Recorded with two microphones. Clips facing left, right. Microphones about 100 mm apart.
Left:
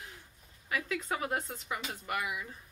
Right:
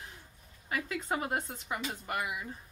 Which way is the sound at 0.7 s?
30° right (ahead or behind).